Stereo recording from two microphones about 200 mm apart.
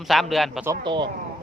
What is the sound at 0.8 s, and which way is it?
Speech, 25° right (ahead or behind).